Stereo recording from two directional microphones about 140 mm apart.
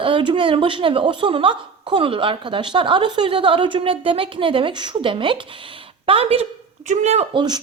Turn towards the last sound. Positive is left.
turn(degrees=-30)  # may be behind; listen again after turning